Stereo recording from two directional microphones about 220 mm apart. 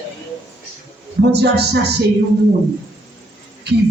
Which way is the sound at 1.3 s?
50° right (ahead or behind).